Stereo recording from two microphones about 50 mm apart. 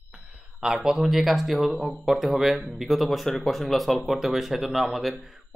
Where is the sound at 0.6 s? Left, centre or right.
Centre.